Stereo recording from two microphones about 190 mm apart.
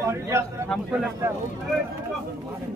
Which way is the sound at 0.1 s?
15° right (ahead or behind).